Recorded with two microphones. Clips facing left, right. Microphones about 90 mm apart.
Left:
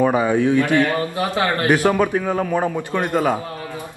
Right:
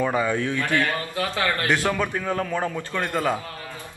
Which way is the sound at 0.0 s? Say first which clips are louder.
Left 6 dB; 20° left (ahead or behind).